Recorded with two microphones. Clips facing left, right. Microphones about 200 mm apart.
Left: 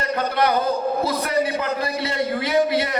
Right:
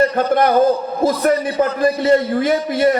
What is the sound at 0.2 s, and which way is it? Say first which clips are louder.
A man's voice: right 7 dB; 45° right (ahead or behind).